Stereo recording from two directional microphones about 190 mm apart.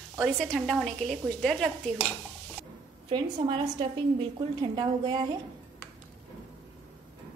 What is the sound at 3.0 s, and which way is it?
A woman's voice, 25° right (ahead or behind).